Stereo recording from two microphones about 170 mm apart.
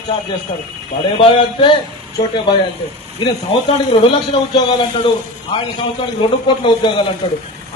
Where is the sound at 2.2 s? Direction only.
25° left (ahead or behind).